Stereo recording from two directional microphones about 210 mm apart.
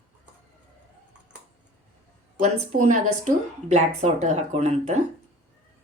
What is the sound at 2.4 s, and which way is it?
Speech, 35° right (ahead or behind).